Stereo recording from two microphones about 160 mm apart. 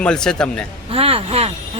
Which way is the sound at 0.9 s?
35° right (ahead or behind).